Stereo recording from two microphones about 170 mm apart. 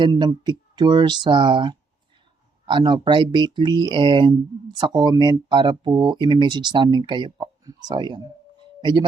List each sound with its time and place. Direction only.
0.0 s speech: 25° right (ahead or behind)